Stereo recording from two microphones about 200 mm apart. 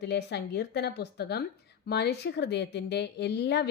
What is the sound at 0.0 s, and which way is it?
A woman's voice, 55° left (ahead or behind).